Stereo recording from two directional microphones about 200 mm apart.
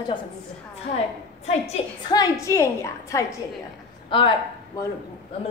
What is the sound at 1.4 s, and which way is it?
Speech, 30° left (ahead or behind).